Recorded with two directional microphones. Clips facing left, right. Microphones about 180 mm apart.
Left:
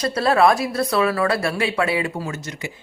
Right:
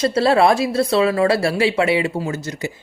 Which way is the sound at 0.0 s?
25° right (ahead or behind).